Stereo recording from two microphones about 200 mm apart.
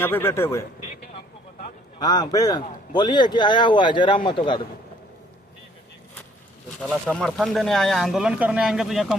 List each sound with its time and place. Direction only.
0.0 s speech: 10° left (ahead or behind)
2.0 s a man's voice: 20° left (ahead or behind)
6.8 s speech: 5° left (ahead or behind)